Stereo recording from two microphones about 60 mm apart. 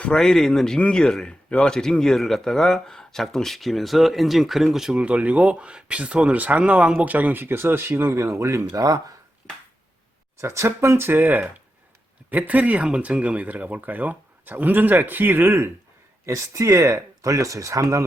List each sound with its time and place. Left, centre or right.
0.0 s a man's voice: centre
4.9 s speech: right
8.7 s speech: right
10.4 s speech: right
16.2 s speech: right